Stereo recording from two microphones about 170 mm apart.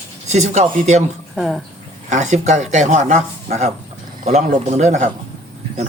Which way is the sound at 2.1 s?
45° right (ahead or behind).